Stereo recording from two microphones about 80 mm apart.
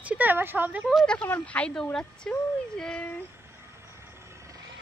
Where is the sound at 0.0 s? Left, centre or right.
Centre.